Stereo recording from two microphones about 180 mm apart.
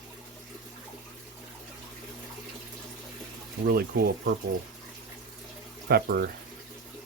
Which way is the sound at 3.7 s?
60° right (ahead or behind).